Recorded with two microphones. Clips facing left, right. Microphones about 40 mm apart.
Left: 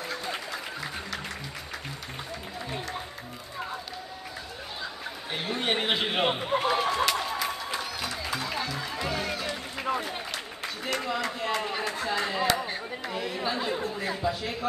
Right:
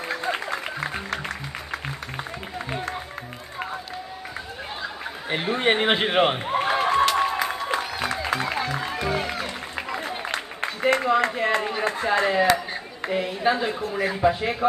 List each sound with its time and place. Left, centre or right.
0.3 s music: right
5.3 s a man's voice: right
6.6 s music: right
10.3 s a sound: right
11.8 s a man's voice: right